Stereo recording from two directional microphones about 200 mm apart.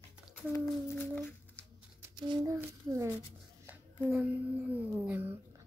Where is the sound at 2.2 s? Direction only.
20° right (ahead or behind).